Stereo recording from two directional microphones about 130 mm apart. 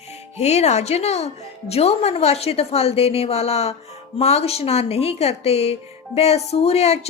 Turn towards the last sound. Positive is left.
turn(degrees=50)  # may be behind; listen again after turning